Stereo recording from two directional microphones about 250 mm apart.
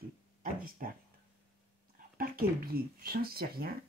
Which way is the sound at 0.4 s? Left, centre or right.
Right.